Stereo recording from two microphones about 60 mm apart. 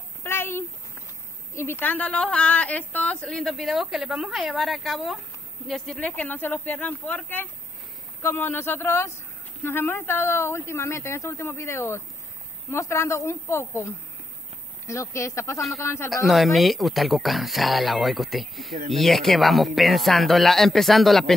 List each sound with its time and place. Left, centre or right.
0.2 s a sound: left
1.5 s a woman's voice: left
1.8 s speech: left
2.0 s speech: centre
3.3 s speech: centre
5.9 s speech: left
12.7 s speech: left
16.3 s speech: centre